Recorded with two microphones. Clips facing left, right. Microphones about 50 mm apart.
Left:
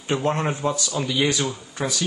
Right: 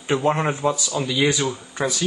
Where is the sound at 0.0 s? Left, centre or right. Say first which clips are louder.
Right 3 dB; centre.